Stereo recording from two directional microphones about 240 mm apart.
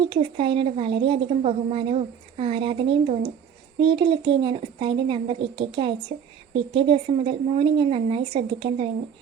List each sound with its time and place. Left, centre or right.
0.1 s a woman's voice: right